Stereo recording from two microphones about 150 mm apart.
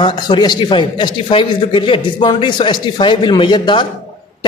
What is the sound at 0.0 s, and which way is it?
Speech, 30° left (ahead or behind).